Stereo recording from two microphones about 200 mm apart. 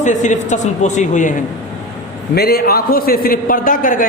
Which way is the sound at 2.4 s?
50° left (ahead or behind).